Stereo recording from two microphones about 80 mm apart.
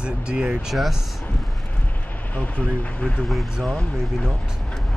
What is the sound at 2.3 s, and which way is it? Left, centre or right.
Speech, centre.